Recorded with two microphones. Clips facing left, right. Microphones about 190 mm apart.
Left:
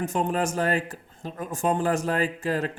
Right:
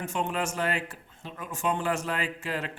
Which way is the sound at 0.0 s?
40° left (ahead or behind).